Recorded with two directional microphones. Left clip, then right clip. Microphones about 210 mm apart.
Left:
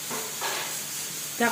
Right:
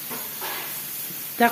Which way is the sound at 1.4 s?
55° right (ahead or behind).